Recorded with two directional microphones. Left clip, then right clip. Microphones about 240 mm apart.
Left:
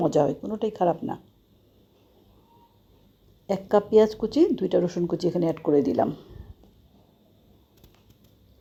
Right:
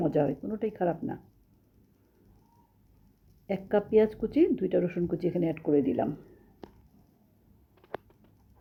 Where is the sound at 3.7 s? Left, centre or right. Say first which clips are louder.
Left 5 dB; centre.